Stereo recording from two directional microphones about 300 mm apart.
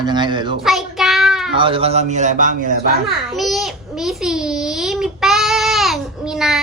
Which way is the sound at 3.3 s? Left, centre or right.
Centre.